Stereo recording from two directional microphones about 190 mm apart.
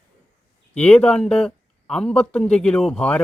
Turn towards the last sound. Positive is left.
turn(degrees=5)  # may be behind; listen again after turning